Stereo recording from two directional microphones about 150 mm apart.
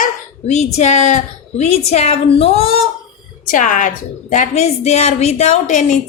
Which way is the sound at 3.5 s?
60° left (ahead or behind).